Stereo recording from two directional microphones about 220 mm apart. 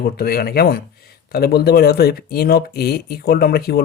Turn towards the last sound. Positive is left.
turn(degrees=45)  # may be behind; listen again after turning